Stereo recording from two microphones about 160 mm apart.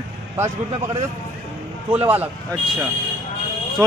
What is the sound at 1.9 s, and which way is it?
Speech, 10° right (ahead or behind).